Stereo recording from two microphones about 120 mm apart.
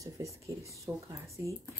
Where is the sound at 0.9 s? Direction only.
Centre (ahead or behind).